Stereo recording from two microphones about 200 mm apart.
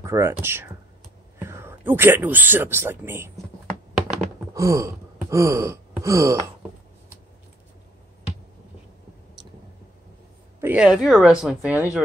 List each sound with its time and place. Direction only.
0.0 s speech: 15° right (ahead or behind)
4.6 s wail: 15° right (ahead or behind)
10.6 s speech: 5° right (ahead or behind)